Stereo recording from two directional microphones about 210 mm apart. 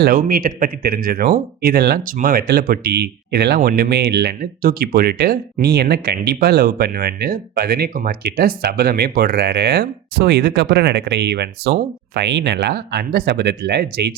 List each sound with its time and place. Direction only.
0.0 s speech: 40° right (ahead or behind)